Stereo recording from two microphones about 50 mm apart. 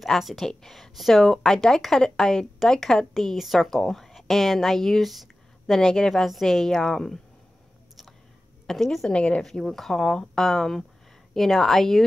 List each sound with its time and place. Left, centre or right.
0.0 s speech: centre
5.8 s speech: centre
6.2 s speech: centre
8.6 s speech: centre
9.1 s a woman's voice: centre
9.4 s speech: centre